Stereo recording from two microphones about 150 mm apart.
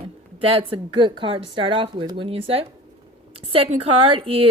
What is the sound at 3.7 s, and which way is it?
Speech, 40° right (ahead or behind).